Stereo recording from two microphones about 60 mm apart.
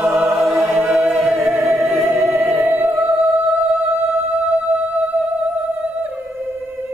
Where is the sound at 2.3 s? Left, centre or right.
Right.